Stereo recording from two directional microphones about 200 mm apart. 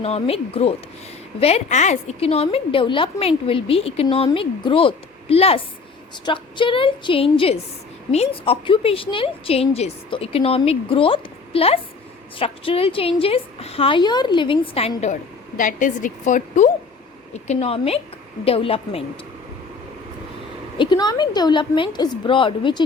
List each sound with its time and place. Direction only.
0.0 s a woman's voice: 30° left (ahead or behind)
20.7 s a woman's voice: 20° left (ahead or behind)